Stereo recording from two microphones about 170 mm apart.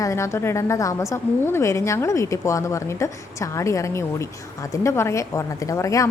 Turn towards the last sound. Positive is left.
turn(degrees=20)  # may be behind; listen again after turning